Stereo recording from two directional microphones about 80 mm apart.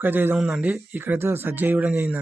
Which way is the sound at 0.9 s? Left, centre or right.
Right.